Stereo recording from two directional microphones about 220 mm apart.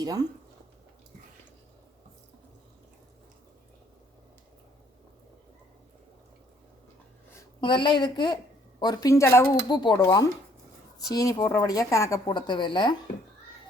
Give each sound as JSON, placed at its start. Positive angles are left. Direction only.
{"t": 0.0, "sound": "speech", "side_deg": -15}
{"t": 7.3, "sound": "a woman's voice", "side_deg": 20}